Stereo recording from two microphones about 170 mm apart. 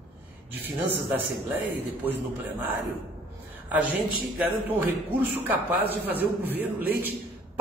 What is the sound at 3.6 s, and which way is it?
A woman's voice, 10° right (ahead or behind).